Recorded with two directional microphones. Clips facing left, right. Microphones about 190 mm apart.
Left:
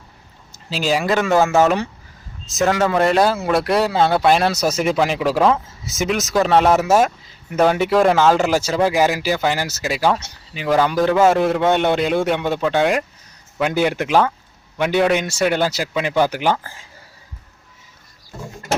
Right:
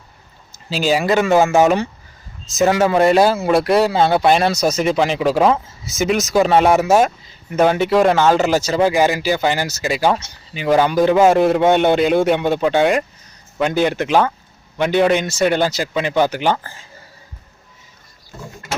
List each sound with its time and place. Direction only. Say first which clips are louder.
0.5 s speech: right 2 dB; centre (ahead or behind)
2.5 s speech: right 3 dB; centre (ahead or behind)
10.9 s a man's voice: right 2 dB; 15° right (ahead or behind)
11.3 s speech: right 3 dB; 5° right (ahead or behind)